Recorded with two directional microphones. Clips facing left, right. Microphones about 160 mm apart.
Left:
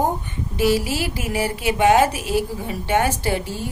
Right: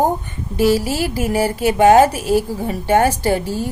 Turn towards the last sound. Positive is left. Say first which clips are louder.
# right 5 dB
turn(degrees=-40)  # may be behind; listen again after turning